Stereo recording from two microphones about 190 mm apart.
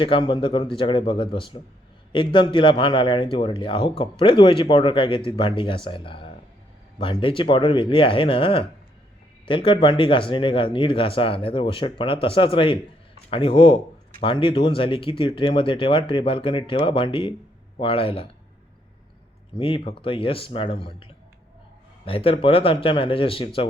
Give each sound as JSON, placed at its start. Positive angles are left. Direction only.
{"t": 0.0, "sound": "a man's voice", "side_deg": 25}
{"t": 19.5, "sound": "a man's voice", "side_deg": 25}